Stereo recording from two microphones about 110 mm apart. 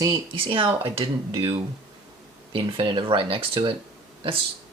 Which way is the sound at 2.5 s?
50° right (ahead or behind).